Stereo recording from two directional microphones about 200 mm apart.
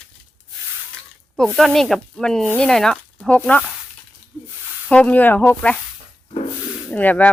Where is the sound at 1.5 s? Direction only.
Centre (ahead or behind).